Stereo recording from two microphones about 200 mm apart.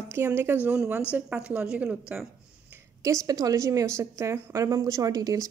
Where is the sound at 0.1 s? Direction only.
10° right (ahead or behind).